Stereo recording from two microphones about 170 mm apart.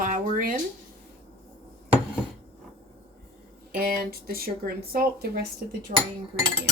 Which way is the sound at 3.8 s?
60° right (ahead or behind).